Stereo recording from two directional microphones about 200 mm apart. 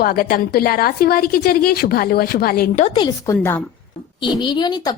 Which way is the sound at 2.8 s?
25° left (ahead or behind).